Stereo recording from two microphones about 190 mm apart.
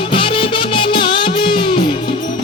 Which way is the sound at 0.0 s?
25° left (ahead or behind).